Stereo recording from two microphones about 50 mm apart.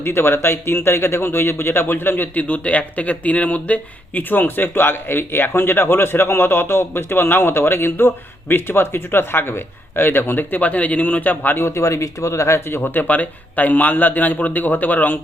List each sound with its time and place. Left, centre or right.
0.0 s speech: left
4.2 s speech: left
11.6 s speech: left
12.8 s a man's voice: left